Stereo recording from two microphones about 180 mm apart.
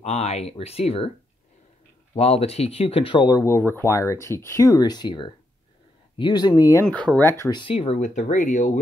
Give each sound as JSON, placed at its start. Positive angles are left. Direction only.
{"t": 0.0, "sound": "speech", "side_deg": 35}
{"t": 2.1, "sound": "speech", "side_deg": 35}
{"t": 6.9, "sound": "speech", "side_deg": 5}
{"t": 7.6, "sound": "speech", "side_deg": 30}